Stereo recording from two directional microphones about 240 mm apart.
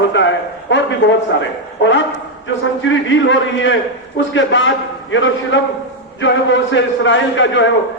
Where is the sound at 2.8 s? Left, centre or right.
Left.